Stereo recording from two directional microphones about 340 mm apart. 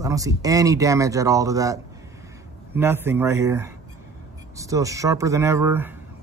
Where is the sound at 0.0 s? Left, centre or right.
Centre.